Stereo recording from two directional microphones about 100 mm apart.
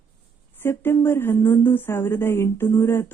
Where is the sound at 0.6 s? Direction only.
25° left (ahead or behind).